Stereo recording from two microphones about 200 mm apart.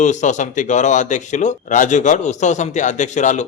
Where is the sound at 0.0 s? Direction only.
35° left (ahead or behind).